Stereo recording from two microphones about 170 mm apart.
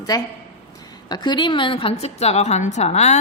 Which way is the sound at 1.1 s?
25° left (ahead or behind).